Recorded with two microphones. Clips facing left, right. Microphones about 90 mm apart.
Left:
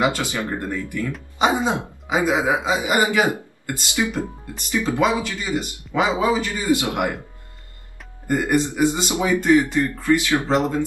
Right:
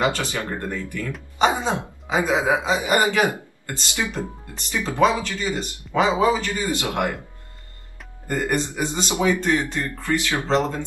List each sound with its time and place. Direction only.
0.0 s speech: 15° left (ahead or behind)
8.3 s speech: 15° left (ahead or behind)